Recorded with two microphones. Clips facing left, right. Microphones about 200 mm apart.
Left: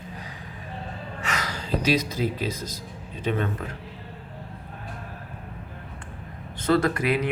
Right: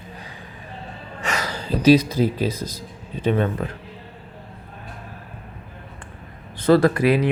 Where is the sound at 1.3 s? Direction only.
30° right (ahead or behind).